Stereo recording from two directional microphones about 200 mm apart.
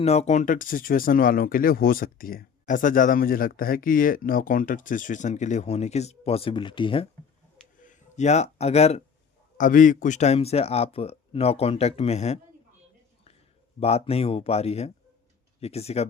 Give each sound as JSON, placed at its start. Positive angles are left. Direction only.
{"t": 0.0, "sound": "speech", "side_deg": 30}
{"t": 7.8, "sound": "a sound", "side_deg": 40}
{"t": 9.6, "sound": "speech", "side_deg": 40}
{"t": 13.7, "sound": "speech", "side_deg": 30}